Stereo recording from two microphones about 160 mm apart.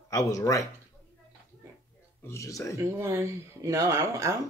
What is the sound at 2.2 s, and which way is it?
Speech, 20° left (ahead or behind).